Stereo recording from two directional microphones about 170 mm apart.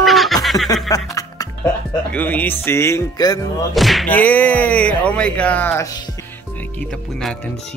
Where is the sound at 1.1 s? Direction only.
20° left (ahead or behind).